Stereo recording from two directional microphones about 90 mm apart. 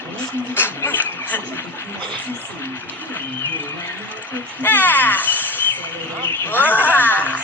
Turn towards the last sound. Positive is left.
turn(degrees=20)  # may be behind; listen again after turning